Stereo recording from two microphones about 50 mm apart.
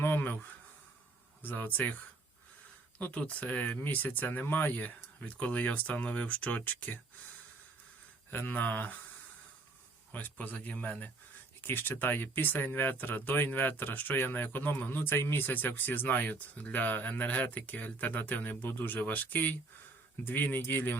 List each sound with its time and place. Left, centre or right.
0.0 s a sound: left
1.4 s speech: left
3.0 s speech: left
5.2 s speech: left
8.3 s speech: left
10.1 s speech: left
11.6 s speech: left
15.5 s speech: left